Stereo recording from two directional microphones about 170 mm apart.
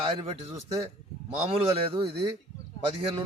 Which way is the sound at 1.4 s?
30° right (ahead or behind).